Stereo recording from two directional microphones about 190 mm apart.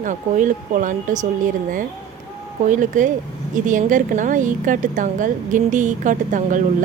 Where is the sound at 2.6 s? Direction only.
40° right (ahead or behind).